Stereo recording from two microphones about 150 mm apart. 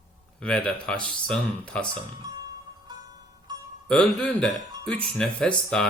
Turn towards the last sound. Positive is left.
turn(degrees=5)  # may be behind; listen again after turning